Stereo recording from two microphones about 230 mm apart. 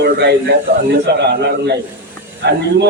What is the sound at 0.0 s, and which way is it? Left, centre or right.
A man's voice, right.